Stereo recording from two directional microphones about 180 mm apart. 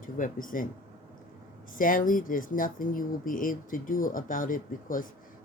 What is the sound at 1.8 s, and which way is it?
Speech, 50° left (ahead or behind).